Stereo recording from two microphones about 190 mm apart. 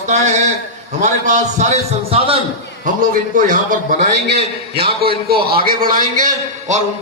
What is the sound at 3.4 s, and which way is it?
Speech, 45° right (ahead or behind).